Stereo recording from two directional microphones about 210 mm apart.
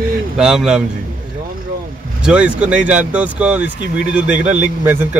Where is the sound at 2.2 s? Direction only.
5° right (ahead or behind).